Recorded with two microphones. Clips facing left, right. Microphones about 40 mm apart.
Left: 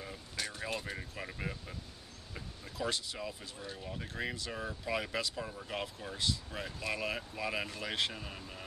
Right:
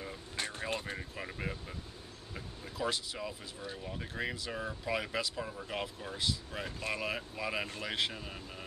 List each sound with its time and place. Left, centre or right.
0.4 s vehicle: right
0.9 s speech: centre
2.8 s speech: centre